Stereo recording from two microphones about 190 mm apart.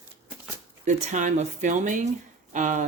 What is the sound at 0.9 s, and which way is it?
Speech, 40° right (ahead or behind).